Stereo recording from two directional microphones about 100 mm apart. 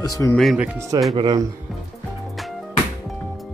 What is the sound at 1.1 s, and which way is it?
Speech, 45° right (ahead or behind).